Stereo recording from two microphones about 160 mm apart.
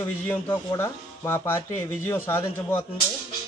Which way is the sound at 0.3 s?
10° left (ahead or behind).